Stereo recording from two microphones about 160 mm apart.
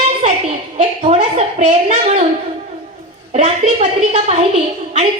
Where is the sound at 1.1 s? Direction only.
45° right (ahead or behind).